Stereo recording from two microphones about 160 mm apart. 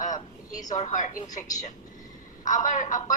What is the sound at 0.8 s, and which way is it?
Speech, 50° left (ahead or behind).